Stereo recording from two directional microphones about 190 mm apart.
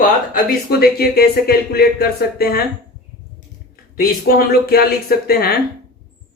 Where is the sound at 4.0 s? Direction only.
55° left (ahead or behind).